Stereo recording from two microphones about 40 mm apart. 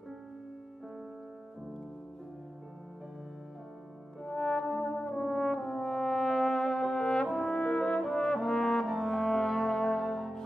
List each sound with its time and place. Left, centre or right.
4.2 s brass instrument: centre
7.0 s french horn: left
7.8 s brass instrument: centre